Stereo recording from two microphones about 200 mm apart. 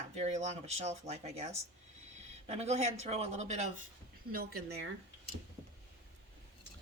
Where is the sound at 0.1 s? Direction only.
35° right (ahead or behind).